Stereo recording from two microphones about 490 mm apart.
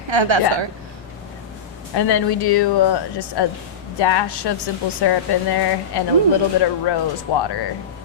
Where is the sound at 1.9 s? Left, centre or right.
Left.